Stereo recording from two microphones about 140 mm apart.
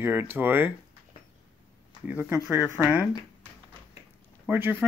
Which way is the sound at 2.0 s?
15° right (ahead or behind).